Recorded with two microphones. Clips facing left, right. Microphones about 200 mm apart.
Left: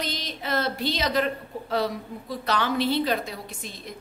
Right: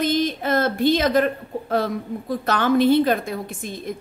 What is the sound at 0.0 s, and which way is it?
A woman's voice, 50° right (ahead or behind).